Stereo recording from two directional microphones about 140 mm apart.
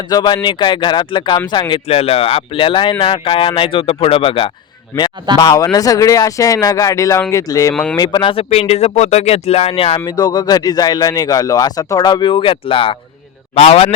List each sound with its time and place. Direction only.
0.1 s speech: 30° left (ahead or behind)
1.9 s speech: 45° left (ahead or behind)
5.4 s speech: 25° left (ahead or behind)
7.7 s speech: 5° left (ahead or behind)
7.9 s speech: 30° left (ahead or behind)
10.1 s speech: 30° left (ahead or behind); by 13.9 s 45° left (ahead or behind)